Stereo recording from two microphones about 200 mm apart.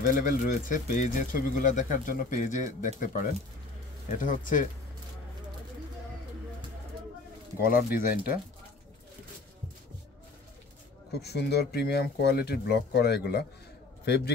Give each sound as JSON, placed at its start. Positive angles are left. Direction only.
{"t": 0.0, "sound": "speech", "side_deg": 40}
{"t": 7.6, "sound": "speech", "side_deg": 45}
{"t": 11.1, "sound": "a man's voice", "side_deg": 55}